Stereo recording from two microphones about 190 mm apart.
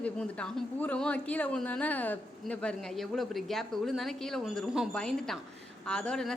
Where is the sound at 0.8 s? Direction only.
5° left (ahead or behind).